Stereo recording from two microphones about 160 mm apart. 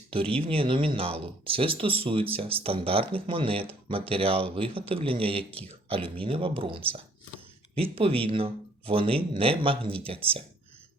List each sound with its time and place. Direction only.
0.1 s speech: 35° right (ahead or behind)